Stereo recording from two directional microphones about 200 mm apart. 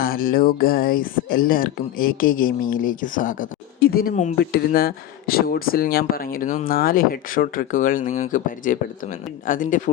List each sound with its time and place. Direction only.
0.0 s speech: 45° left (ahead or behind)
4.4 s speech: 50° left (ahead or behind)